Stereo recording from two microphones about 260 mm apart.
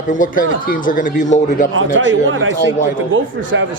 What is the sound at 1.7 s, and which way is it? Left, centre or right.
A man's voice, right.